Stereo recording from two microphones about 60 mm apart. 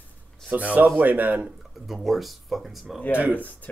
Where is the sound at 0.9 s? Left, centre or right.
Right.